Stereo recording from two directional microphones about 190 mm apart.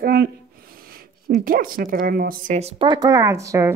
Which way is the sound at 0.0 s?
50° right (ahead or behind).